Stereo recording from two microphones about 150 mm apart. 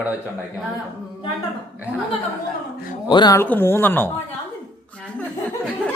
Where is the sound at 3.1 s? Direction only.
30° left (ahead or behind).